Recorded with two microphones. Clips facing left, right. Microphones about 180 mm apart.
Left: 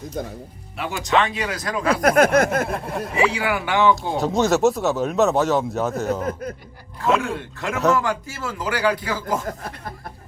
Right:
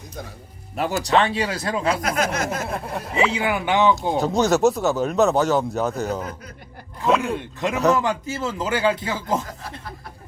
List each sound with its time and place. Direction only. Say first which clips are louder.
0.8 s speech: right 2 dB; 40° right (ahead or behind)
1.9 s a sound: left 9 dB; 55° left (ahead or behind)
2.6 s speech: left 2 dB; centre (ahead or behind)
3.2 s speech: even; 20° right (ahead or behind)
4.2 s speech: even; centre (ahead or behind)
7.2 s speech: right 2 dB; 20° right (ahead or behind)
9.5 s speech: left 5 dB; 50° left (ahead or behind)